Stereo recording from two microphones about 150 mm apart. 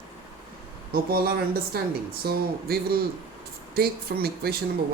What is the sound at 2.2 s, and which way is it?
Speech, 90° right.